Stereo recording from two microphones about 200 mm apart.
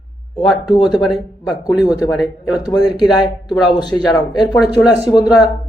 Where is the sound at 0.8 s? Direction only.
Centre (ahead or behind).